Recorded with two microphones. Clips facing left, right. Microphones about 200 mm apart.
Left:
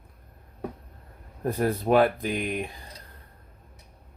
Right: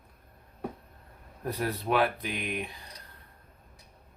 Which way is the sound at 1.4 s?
45° left (ahead or behind).